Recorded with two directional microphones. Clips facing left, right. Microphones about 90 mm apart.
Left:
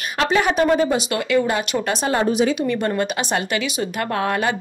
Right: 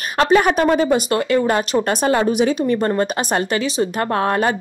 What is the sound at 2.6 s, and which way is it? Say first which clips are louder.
A woman's voice: right 3 dB; 35° right (ahead or behind).